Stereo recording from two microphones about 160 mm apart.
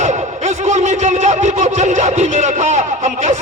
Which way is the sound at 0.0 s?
45° right (ahead or behind).